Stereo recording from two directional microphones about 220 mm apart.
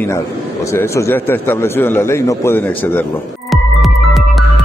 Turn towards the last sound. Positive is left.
turn(degrees=0)  # may be behind; listen again after turning